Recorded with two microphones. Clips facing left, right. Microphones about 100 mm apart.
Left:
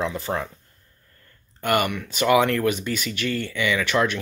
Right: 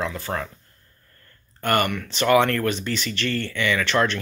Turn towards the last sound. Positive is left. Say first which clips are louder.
# even
turn(degrees=10)  # may be behind; listen again after turning